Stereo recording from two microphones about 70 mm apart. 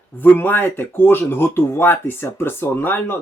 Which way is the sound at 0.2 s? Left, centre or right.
Left.